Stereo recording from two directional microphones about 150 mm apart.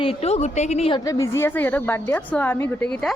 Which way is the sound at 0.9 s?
25° left (ahead or behind).